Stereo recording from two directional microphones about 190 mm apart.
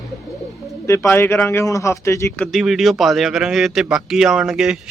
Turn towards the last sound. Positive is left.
turn(degrees=-5)  # may be behind; listen again after turning